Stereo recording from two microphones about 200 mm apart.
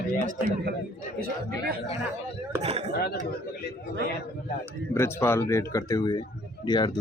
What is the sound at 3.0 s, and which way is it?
Speech, 55° left (ahead or behind).